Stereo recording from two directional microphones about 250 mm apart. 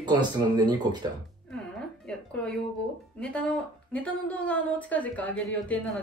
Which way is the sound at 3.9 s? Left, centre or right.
Centre.